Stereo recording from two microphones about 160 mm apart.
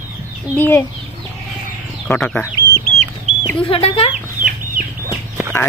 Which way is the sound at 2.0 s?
5° left (ahead or behind).